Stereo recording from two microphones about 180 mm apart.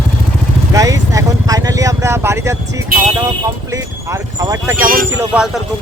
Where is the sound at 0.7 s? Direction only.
20° right (ahead or behind).